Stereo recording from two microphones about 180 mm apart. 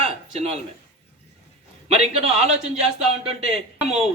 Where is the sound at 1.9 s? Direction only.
35° right (ahead or behind).